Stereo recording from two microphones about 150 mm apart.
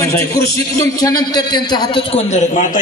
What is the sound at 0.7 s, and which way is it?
A man's voice, 25° left (ahead or behind).